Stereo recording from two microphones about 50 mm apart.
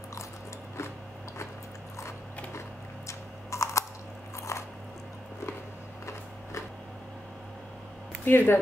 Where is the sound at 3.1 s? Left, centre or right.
Left.